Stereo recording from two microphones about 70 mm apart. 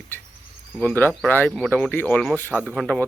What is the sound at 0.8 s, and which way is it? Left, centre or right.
Speech, left.